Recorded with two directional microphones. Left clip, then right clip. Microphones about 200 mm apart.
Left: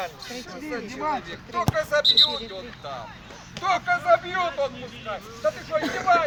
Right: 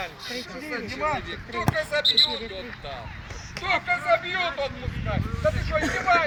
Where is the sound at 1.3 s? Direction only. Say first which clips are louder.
Left 1 dB; 45° left (ahead or behind).